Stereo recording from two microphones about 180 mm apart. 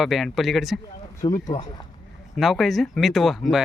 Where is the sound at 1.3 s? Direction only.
45° left (ahead or behind).